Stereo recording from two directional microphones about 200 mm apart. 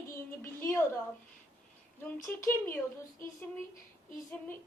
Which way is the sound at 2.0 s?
10° left (ahead or behind).